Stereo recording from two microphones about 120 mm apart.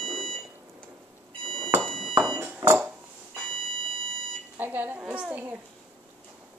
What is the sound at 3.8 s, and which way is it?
Alarm clock, 45° right (ahead or behind).